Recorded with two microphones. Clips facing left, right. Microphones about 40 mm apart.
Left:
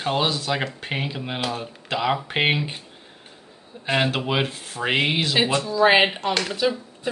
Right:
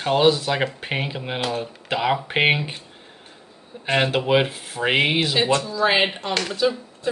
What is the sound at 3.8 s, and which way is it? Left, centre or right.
Speech, centre.